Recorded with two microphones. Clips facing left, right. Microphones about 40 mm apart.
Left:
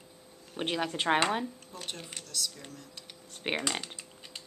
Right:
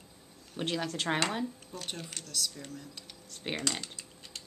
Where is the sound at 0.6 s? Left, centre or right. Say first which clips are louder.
Left 2 dB; left.